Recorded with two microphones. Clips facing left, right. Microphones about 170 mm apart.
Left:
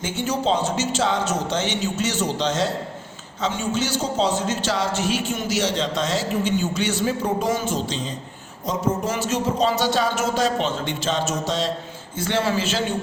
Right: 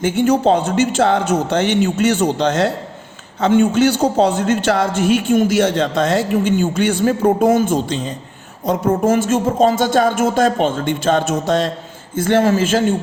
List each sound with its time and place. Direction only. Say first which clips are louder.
0.0 s a man's voice: right 9 dB; 55° right (ahead or behind)